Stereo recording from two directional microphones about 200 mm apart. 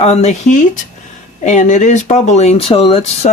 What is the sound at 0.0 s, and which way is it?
Speech, 35° left (ahead or behind).